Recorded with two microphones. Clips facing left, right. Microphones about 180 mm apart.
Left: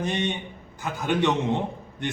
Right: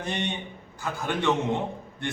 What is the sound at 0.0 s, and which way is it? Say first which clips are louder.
A man's voice: left 3 dB; 20° left (ahead or behind).